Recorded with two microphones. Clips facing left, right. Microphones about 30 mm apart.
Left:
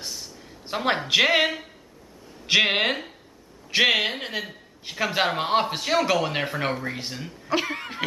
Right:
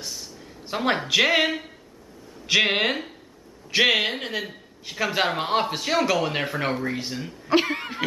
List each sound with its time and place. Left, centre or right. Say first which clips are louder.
0.0 s a sound: even; centre
1.0 s a man's voice: left 1 dB; centre
7.4 s cough: right 4 dB; centre